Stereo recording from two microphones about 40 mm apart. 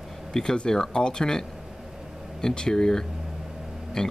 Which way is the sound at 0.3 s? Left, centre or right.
Centre.